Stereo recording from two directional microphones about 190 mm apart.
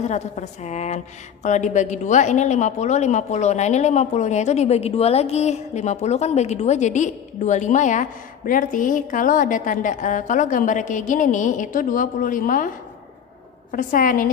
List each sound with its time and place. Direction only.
0.0 s a woman's voice: 35° left (ahead or behind)